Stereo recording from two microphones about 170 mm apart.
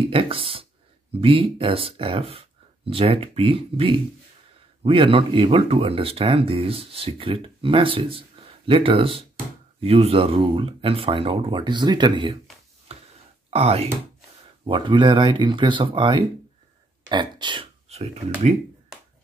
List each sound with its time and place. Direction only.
0.1 s speech: 30° right (ahead or behind)
13.5 s speech: 35° right (ahead or behind)